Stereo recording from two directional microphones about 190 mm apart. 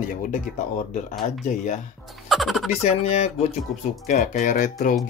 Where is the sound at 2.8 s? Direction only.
35° left (ahead or behind).